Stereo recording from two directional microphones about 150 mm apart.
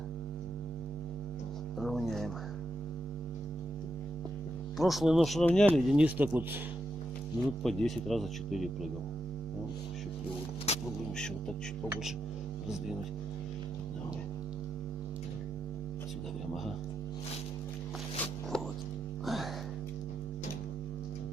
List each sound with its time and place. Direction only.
1.8 s a sound: centre (ahead or behind)
4.8 s speech: centre (ahead or behind)
5.9 s speech: 10° right (ahead or behind)
7.6 s speech: centre (ahead or behind)
10.7 s music: 45° left (ahead or behind)
18.5 s music: 5° left (ahead or behind)